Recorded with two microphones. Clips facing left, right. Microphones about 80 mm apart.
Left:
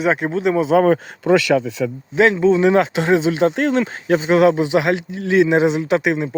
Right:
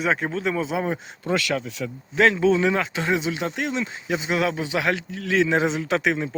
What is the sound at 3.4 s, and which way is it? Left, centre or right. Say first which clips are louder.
Speech: left 10 dB; left.